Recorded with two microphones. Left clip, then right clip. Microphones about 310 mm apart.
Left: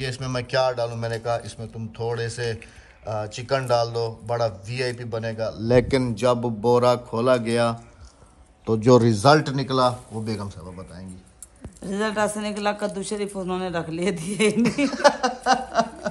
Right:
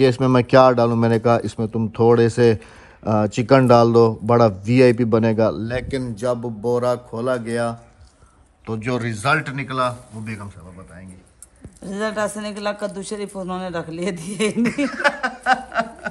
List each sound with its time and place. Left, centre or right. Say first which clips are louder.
0.0 s speech: right 13 dB; centre
5.9 s a man's voice: left 2 dB; centre
11.8 s speech: right 1 dB; centre